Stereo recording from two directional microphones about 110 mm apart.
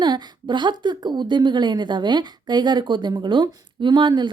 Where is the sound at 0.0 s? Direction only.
40° right (ahead or behind).